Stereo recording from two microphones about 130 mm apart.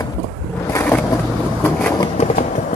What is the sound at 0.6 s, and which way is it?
Vehicle, 15° left (ahead or behind).